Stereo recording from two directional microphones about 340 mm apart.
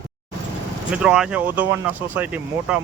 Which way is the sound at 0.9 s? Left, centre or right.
Centre.